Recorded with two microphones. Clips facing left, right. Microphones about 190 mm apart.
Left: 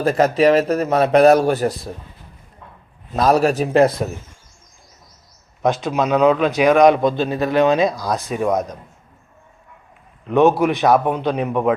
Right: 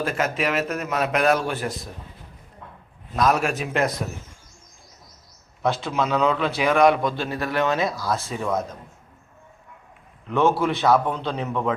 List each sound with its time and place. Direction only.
0.0 s a man's voice: 40° left (ahead or behind)
3.1 s a man's voice: 30° left (ahead or behind)
5.6 s a man's voice: 15° left (ahead or behind)
10.2 s a man's voice: 20° left (ahead or behind)